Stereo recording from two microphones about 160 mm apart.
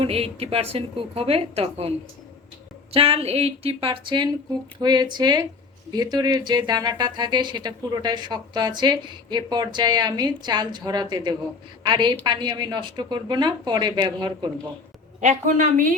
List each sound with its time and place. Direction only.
0.0 s a woman's voice: 40° right (ahead or behind)
2.9 s a woman's voice: 40° right (ahead or behind)
15.2 s a woman's voice: 50° right (ahead or behind)